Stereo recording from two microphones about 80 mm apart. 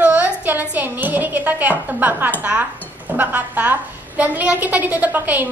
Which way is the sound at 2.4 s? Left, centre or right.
Centre.